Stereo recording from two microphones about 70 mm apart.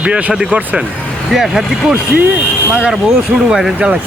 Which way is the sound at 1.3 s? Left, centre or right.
Centre.